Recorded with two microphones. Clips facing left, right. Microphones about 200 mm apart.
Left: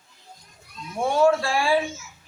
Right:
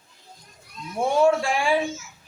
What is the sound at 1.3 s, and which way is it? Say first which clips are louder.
Speech: even; 15° right (ahead or behind).